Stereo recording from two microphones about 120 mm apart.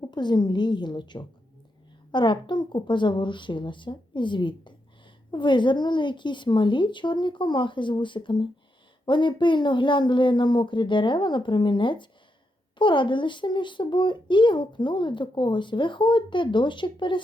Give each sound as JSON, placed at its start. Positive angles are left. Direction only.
{"t": 0.0, "sound": "a child's voice", "side_deg": 40}